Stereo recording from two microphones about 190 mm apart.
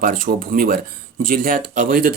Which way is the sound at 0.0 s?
50° right (ahead or behind).